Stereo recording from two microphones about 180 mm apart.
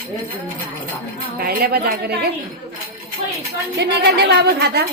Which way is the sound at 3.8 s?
65° right (ahead or behind).